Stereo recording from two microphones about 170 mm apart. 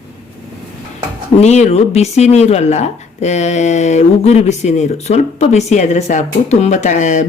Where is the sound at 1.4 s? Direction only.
40° left (ahead or behind).